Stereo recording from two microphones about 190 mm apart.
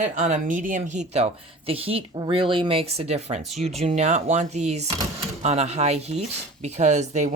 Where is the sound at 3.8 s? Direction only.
35° right (ahead or behind).